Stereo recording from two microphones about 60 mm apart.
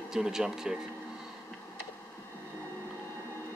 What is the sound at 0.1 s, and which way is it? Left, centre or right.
Speech, centre.